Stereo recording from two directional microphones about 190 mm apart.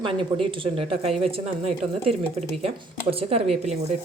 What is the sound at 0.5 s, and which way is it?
A woman's voice, 30° right (ahead or behind).